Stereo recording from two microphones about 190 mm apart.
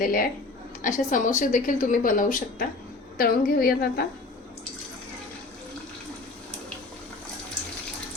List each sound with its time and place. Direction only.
0.0 s a woman's voice: 50° left (ahead or behind)